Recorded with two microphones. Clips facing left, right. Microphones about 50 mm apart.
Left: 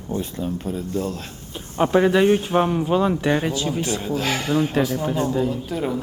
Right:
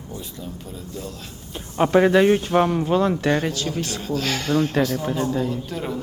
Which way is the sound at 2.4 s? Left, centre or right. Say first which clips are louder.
Right 1 dB; centre.